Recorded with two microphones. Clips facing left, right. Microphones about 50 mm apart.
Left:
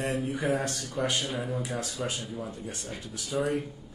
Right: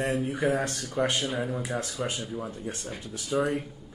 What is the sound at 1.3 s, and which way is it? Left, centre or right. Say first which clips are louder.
Speech: right 2 dB; right.